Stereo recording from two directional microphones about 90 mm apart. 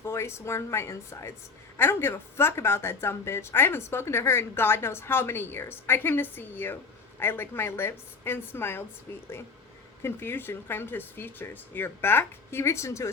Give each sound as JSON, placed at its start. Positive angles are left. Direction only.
{"t": 0.0, "sound": "speech", "side_deg": 30}
{"t": 10.0, "sound": "speech", "side_deg": 25}